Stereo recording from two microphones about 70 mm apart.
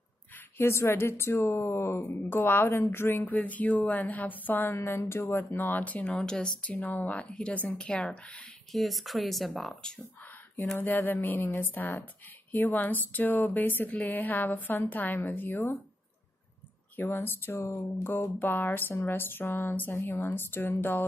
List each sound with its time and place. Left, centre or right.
0.6 s speech: left
4.7 s speech: left; by 6.5 s centre
6.6 s speech: left
8.7 s speech: centre
10.8 s speech: left
16.9 s speech: left